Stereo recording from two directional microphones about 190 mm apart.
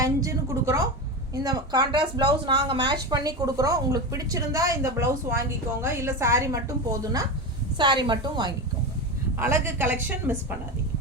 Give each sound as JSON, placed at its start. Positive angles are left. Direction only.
{"t": 0.0, "sound": "a woman's voice", "side_deg": -15}
{"t": 9.4, "sound": "a woman's voice", "side_deg": -10}